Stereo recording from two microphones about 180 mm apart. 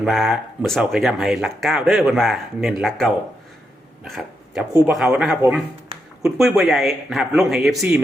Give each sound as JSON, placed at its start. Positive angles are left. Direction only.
{"t": 0.0, "sound": "speech", "side_deg": 0}
{"t": 4.7, "sound": "speech", "side_deg": -20}
{"t": 4.9, "sound": "speech", "side_deg": 0}